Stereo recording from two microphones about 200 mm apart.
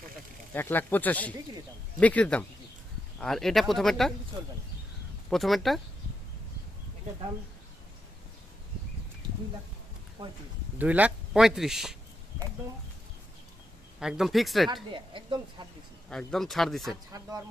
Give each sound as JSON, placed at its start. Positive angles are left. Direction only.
{"t": 0.5, "sound": "speech", "side_deg": 10}
{"t": 5.3, "sound": "speech", "side_deg": 0}
{"t": 10.8, "sound": "speech", "side_deg": -10}
{"t": 14.0, "sound": "speech", "side_deg": 0}
{"t": 14.8, "sound": "speech", "side_deg": -25}
{"t": 16.0, "sound": "speech", "side_deg": 0}
{"t": 17.1, "sound": "speech", "side_deg": -15}